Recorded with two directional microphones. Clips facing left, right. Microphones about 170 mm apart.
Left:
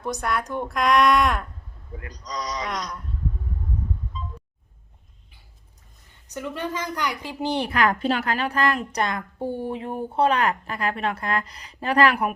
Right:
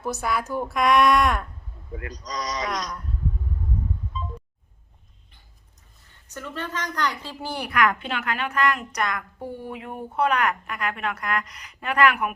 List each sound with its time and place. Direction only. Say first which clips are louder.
0.0 s a woman's voice: even; 5° right (ahead or behind)
2.0 s speech: right 1 dB; 90° right
2.6 s a woman's voice: right 1 dB; centre (ahead or behind)
6.2 s a woman's voice: left 4 dB; 15° left (ahead or behind); by 12.3 s 35° left (ahead or behind)